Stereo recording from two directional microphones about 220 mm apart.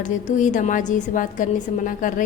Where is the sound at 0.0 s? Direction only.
35° left (ahead or behind).